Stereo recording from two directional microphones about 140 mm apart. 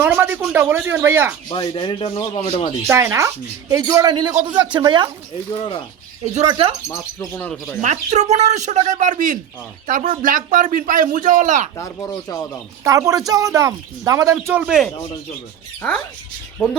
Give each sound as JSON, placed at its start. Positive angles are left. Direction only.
{"t": 0.0, "sound": "speech", "side_deg": -15}
{"t": 1.5, "sound": "speech", "side_deg": 35}
{"t": 2.8, "sound": "speech", "side_deg": -20}
{"t": 5.5, "sound": "speech", "side_deg": 40}
{"t": 6.4, "sound": "speech", "side_deg": -30}
{"t": 6.8, "sound": "speech", "side_deg": 20}
{"t": 7.8, "sound": "a man's voice", "side_deg": -55}
{"t": 11.8, "sound": "speech", "side_deg": 25}
{"t": 12.8, "sound": "speech", "side_deg": -25}
{"t": 14.5, "sound": "speech", "side_deg": -5}